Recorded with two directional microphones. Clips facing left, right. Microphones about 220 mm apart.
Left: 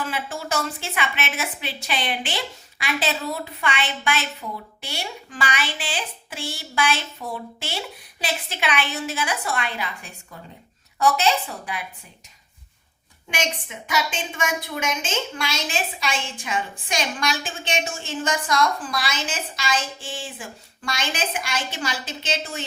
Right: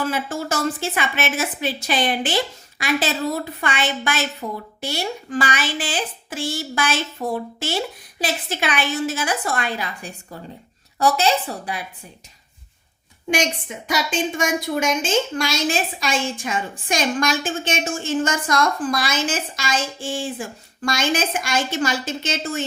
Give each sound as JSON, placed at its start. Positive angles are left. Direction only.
{"t": 0.1, "sound": "a woman's voice", "side_deg": -40}
{"t": 13.3, "sound": "a woman's voice", "side_deg": -40}